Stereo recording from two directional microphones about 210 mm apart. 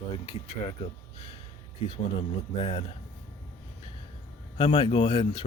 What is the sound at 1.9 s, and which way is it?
Speech, 25° left (ahead or behind).